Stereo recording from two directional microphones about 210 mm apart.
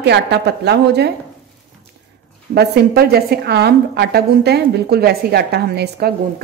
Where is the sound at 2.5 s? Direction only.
50° right (ahead or behind).